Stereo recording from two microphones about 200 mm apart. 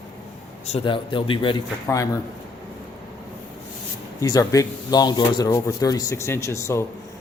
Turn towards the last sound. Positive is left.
turn(degrees=15)  # may be behind; listen again after turning